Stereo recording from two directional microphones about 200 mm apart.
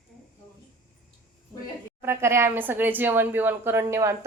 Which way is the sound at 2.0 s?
15° right (ahead or behind).